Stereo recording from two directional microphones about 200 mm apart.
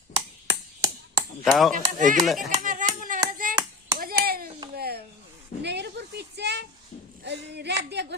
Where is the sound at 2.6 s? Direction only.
40° right (ahead or behind).